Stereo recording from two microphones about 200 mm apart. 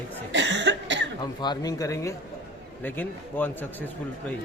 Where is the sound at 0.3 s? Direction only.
60° right (ahead or behind).